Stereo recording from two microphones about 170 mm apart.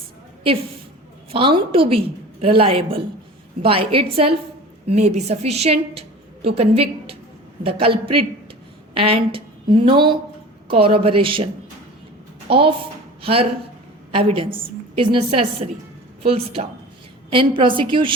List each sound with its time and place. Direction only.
1.3 s a woman's voice: 30° right (ahead or behind)
12.5 s a woman's voice: 30° right (ahead or behind)